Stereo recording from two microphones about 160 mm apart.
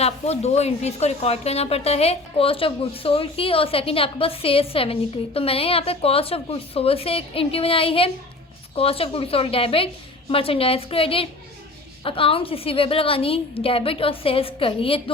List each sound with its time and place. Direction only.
0.0 s a woman's voice: 40° left (ahead or behind)